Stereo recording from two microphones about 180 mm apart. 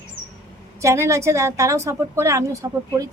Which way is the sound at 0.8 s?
15° right (ahead or behind).